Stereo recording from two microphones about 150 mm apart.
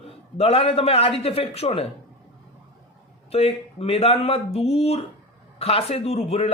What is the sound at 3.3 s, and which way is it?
Speech, 40° left (ahead or behind).